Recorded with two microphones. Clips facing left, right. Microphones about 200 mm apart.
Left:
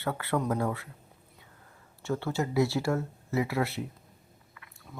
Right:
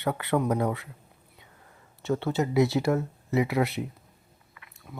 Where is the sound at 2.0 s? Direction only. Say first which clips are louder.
Right 4 dB; 20° right (ahead or behind).